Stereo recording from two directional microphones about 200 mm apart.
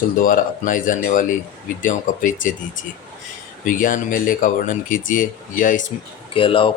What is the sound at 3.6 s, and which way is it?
Speech, 40° left (ahead or behind).